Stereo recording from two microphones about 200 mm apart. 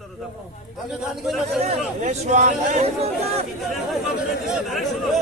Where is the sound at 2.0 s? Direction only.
40° right (ahead or behind).